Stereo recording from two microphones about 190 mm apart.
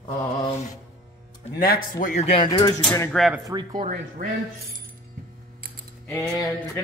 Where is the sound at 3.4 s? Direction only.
20° right (ahead or behind).